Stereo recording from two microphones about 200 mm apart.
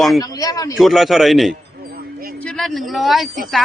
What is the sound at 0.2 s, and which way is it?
Speech, 15° left (ahead or behind).